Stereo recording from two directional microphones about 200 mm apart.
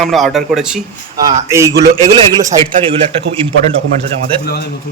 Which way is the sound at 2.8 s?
30° right (ahead or behind).